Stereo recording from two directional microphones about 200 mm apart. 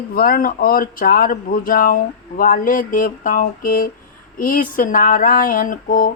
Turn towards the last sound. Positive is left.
turn(degrees=45)  # may be behind; listen again after turning